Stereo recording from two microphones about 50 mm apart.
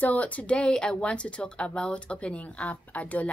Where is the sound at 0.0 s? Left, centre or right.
Left.